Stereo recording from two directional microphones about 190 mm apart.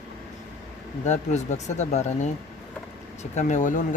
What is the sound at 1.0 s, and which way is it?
Speech, 35° left (ahead or behind).